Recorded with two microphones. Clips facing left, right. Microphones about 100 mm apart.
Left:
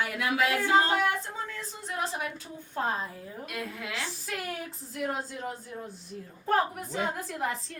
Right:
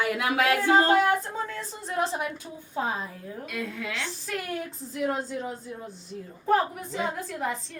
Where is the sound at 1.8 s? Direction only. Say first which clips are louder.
Right 5 dB; 30° right (ahead or behind).